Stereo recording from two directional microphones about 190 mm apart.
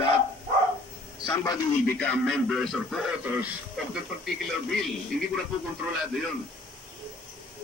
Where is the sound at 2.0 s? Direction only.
5° left (ahead or behind).